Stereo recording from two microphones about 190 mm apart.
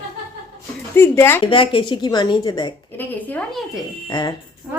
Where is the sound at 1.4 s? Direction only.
25° left (ahead or behind).